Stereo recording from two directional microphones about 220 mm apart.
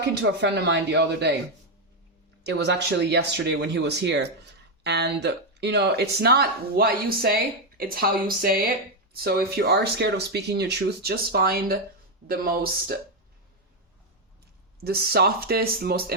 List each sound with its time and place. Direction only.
0.0 s speech: 50° right (ahead or behind)
2.4 s speech: 50° right (ahead or behind)
14.8 s speech: 45° right (ahead or behind)